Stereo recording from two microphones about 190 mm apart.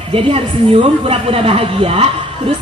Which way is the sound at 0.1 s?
30° right (ahead or behind).